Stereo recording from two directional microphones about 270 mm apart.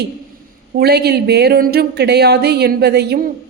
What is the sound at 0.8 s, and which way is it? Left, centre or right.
A woman's voice, right.